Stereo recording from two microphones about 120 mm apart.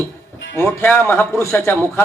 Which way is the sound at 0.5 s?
20° left (ahead or behind).